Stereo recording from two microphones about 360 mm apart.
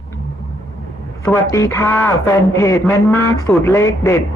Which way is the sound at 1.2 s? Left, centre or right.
Centre.